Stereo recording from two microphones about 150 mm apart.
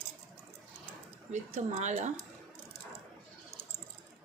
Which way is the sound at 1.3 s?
50° right (ahead or behind).